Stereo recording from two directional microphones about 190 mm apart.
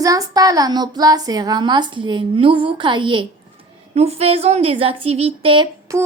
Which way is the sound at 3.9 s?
35° right (ahead or behind).